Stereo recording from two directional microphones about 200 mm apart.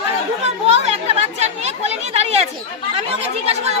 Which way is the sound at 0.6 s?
30° right (ahead or behind).